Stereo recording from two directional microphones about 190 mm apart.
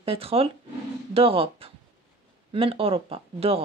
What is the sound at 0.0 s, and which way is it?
Speech, 30° right (ahead or behind).